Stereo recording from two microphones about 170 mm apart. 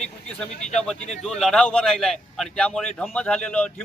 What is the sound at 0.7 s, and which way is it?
A man's voice, 5° left (ahead or behind).